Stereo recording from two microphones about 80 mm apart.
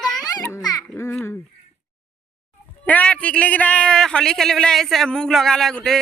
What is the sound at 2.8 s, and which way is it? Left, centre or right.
A man's voice, centre.